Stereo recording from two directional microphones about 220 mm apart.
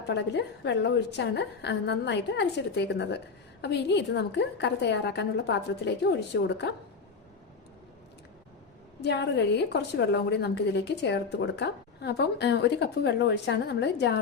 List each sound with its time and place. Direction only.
0.1 s a woman's voice: 50° left (ahead or behind)
9.0 s a woman's voice: 50° left (ahead or behind)